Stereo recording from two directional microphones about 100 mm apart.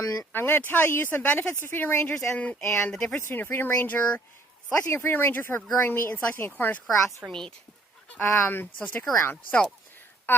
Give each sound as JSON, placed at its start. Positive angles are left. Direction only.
{"t": 0.0, "sound": "speech", "side_deg": 40}
{"t": 0.3, "sound": "speech", "side_deg": 20}
{"t": 2.3, "sound": "speech", "side_deg": 15}
{"t": 2.6, "sound": "speech", "side_deg": 25}
{"t": 2.9, "sound": "speech", "side_deg": 5}
{"t": 3.2, "sound": "speech", "side_deg": 20}
{"t": 7.3, "sound": "speech", "side_deg": 5}
{"t": 8.1, "sound": "speech", "side_deg": 20}
{"t": 10.3, "sound": "a sound", "side_deg": 20}